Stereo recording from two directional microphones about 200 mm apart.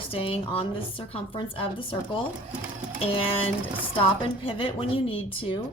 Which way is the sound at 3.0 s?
30° left (ahead or behind).